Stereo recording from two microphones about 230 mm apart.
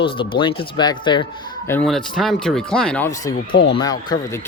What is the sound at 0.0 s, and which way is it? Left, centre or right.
Speech, left.